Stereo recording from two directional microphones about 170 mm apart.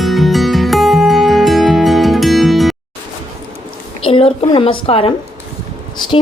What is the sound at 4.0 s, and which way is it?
A woman's voice, 35° left (ahead or behind).